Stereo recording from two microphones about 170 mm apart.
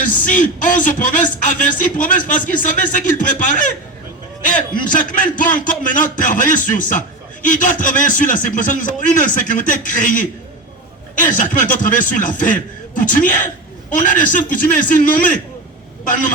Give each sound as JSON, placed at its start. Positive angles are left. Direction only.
{"t": 0.0, "sound": "speech", "side_deg": 50}